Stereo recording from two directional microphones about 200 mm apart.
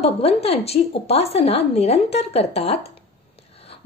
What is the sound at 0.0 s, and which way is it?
A woman's voice, 30° left (ahead or behind).